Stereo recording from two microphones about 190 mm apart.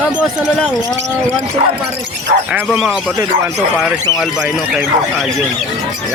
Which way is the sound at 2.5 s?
Centre (ahead or behind).